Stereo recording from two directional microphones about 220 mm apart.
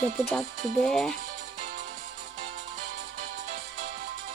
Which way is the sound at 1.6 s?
40° right (ahead or behind).